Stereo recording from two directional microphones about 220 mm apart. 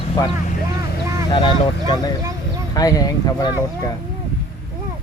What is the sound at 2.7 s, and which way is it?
Speech, 15° left (ahead or behind).